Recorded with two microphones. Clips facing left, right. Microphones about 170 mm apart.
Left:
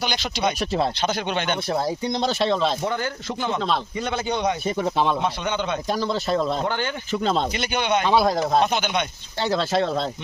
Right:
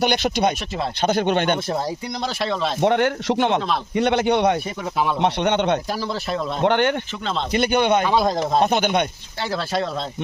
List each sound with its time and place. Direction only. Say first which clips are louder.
0.0 s speech: right 5 dB; 55° right (ahead or behind)
2.8 s speech: right 8 dB; 70° right (ahead or behind)
5.9 s a man's voice: left 2 dB; 5° right (ahead or behind)
6.6 s speech: right 7 dB; 70° right (ahead or behind)
7.1 s speech: left 4 dB; 45° left (ahead or behind)
7.5 s speech: right 5 dB; 50° right (ahead or behind)
9.4 s speech: left 2 dB; 25° left (ahead or behind)